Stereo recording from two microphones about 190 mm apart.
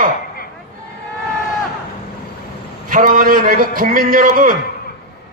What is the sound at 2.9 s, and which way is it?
A man's voice, 45° right (ahead or behind).